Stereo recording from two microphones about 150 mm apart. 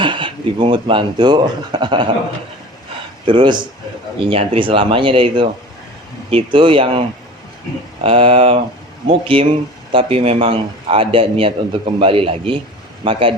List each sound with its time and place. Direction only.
0.0 s speech: 35° right (ahead or behind)
3.2 s a man's voice: 35° right (ahead or behind)
8.0 s a man's voice: 40° right (ahead or behind)